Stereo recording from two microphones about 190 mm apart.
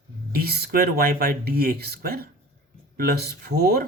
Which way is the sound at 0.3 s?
55° right (ahead or behind).